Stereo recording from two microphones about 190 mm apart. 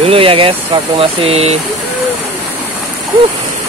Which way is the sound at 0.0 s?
30° right (ahead or behind).